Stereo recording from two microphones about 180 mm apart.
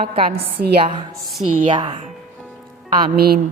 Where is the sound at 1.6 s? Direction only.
30° right (ahead or behind).